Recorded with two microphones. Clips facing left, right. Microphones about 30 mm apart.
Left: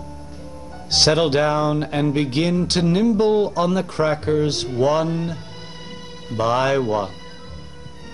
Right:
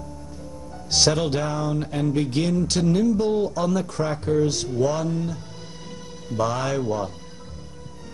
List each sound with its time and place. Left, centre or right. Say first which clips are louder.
0.8 s speech: left 4 dB; left